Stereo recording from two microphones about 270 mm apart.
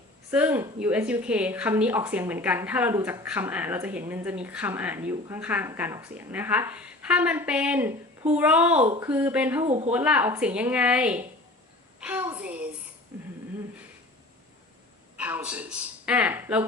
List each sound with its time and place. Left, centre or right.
0.3 s speech: centre
9.6 s speech: right
9.9 s speech: centre
15.2 s speech: centre